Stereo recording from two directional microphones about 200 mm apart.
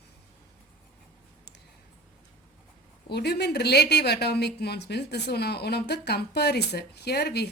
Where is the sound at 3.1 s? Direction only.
55° left (ahead or behind).